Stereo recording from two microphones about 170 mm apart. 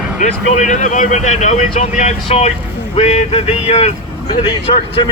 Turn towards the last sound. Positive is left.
turn(degrees=30)  # may be behind; listen again after turning